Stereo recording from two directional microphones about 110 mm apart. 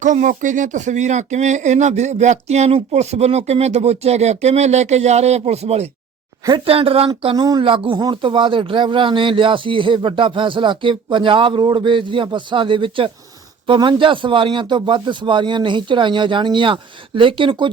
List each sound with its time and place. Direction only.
0.7 s speech: 90° right; by 5.9 s 70° right (ahead or behind)
6.7 s speech: 60° right (ahead or behind)
7.3 s speech: 40° right (ahead or behind)
7.6 s speech: 50° right (ahead or behind)